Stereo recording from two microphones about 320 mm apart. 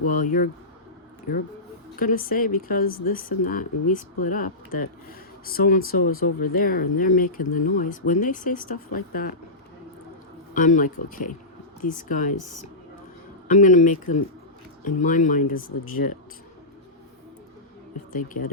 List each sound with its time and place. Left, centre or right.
0.1 s speech: left
5.5 s speech: left
10.5 s speech: left
13.5 s speech: left
18.1 s speech: left